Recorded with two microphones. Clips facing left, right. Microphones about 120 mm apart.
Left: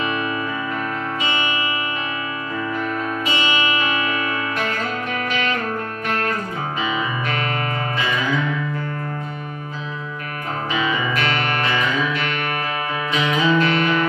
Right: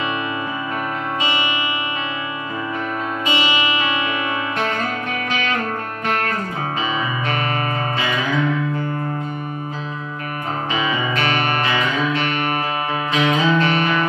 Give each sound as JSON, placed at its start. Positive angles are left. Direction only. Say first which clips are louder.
{"t": 11.1, "sound": "music", "louder": "right 2 dB", "side_deg": -30}